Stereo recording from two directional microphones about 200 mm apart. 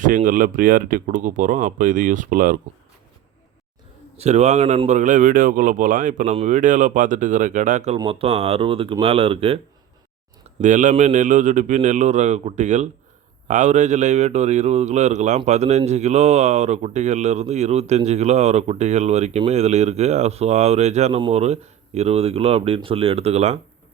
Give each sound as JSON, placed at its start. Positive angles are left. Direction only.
{"t": 0.0, "sound": "speech", "side_deg": -40}
{"t": 4.2, "sound": "speech", "side_deg": -35}
{"t": 10.6, "sound": "speech", "side_deg": -40}